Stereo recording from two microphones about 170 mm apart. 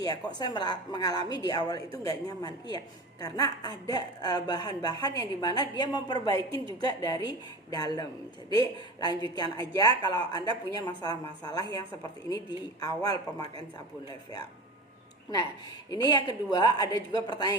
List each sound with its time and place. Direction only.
0.0 s a woman's voice: 25° left (ahead or behind)
15.9 s a woman's voice: 25° left (ahead or behind)